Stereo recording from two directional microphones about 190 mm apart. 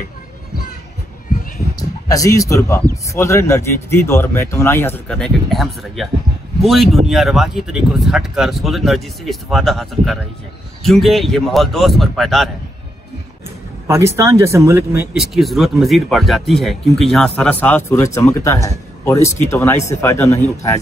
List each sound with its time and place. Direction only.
1.8 s speech: 20° left (ahead or behind); by 12.4 s centre (ahead or behind)
13.8 s speech: 15° right (ahead or behind)
15.1 s speech: centre (ahead or behind); by 20.3 s 15° left (ahead or behind)